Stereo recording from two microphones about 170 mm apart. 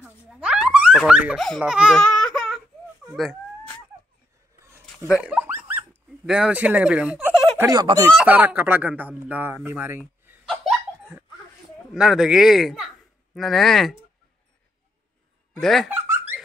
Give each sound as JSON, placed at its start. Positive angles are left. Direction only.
{"t": 0.0, "sound": "a sound", "side_deg": -5}
{"t": 1.6, "sound": "baby cry", "side_deg": -5}
{"t": 3.1, "sound": "speech", "side_deg": 0}
{"t": 5.2, "sound": "dog", "side_deg": -10}
{"t": 6.2, "sound": "speech", "side_deg": -5}
{"t": 8.3, "sound": "speech", "side_deg": -10}
{"t": 10.5, "sound": "laughter", "side_deg": 0}
{"t": 11.9, "sound": "speech", "side_deg": -5}
{"t": 15.6, "sound": "speech", "side_deg": 0}